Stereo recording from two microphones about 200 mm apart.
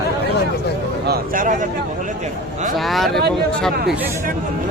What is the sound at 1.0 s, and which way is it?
Speech, 40° right (ahead or behind).